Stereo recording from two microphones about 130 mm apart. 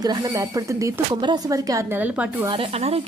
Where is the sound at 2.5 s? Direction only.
45° right (ahead or behind).